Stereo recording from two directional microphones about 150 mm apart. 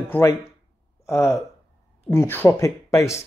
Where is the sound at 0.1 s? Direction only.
20° left (ahead or behind).